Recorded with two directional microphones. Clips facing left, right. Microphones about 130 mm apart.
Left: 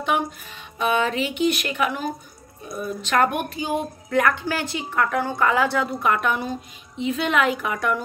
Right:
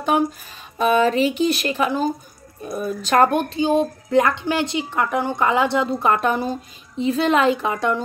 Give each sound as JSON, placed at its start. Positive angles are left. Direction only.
{"t": 0.0, "sound": "a woman's voice", "side_deg": -40}